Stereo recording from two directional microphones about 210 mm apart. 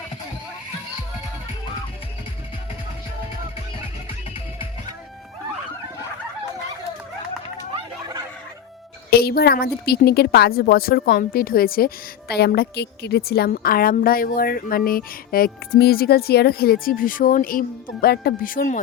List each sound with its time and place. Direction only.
9.0 s a woman's voice: 45° left (ahead or behind)